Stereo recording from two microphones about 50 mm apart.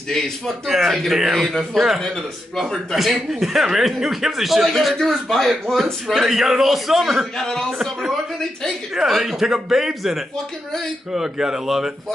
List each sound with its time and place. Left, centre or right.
0.7 s speech: centre
4.6 s speech: centre
7.3 s speech: centre
7.8 s a man's voice: centre